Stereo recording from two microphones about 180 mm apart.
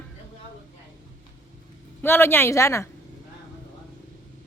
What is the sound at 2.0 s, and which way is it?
Speech, 10° left (ahead or behind).